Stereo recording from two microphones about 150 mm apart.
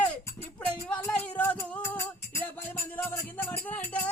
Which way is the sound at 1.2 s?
10° left (ahead or behind).